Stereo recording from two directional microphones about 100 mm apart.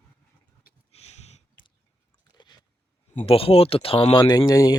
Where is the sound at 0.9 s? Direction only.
90° left.